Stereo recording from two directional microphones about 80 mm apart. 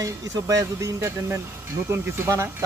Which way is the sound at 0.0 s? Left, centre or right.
Right.